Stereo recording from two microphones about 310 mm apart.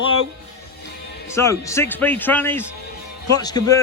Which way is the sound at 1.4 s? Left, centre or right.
Centre.